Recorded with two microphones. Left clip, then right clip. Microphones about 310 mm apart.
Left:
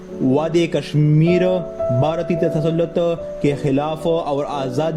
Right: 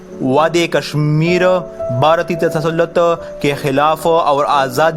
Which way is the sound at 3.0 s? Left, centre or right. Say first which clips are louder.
Right 5 dB; right.